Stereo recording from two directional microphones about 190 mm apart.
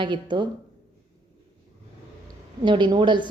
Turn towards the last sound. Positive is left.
turn(degrees=-25)  # may be behind; listen again after turning